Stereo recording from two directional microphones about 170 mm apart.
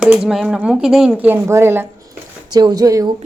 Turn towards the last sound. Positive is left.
turn(degrees=-20)  # may be behind; listen again after turning